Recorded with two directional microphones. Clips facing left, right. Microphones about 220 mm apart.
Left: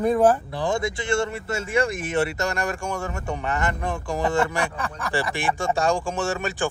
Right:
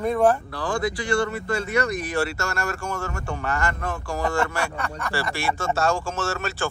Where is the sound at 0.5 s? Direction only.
20° left (ahead or behind).